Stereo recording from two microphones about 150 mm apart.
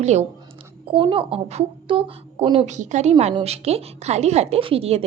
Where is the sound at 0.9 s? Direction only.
35° right (ahead or behind).